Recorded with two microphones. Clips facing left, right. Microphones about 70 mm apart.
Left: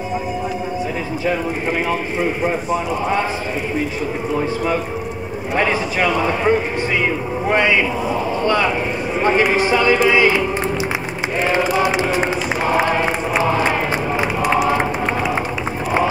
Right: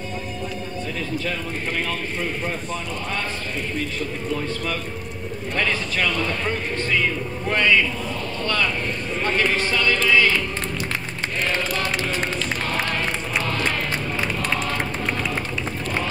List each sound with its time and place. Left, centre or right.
2.2 s a man's voice: centre
4.3 s a man's voice: left
11.4 s a sound: centre